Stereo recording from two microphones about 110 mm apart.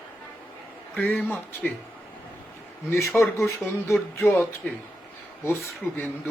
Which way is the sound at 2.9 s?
25° left (ahead or behind).